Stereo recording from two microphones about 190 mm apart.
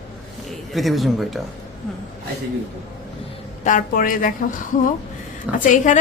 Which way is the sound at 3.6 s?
40° left (ahead or behind).